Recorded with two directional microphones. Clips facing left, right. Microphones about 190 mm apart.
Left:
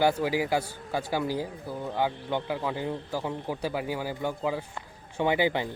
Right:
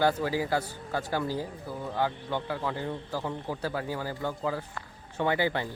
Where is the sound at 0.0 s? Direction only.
15° left (ahead or behind).